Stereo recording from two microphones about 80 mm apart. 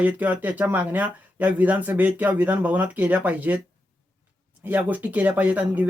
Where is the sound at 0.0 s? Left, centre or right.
Right.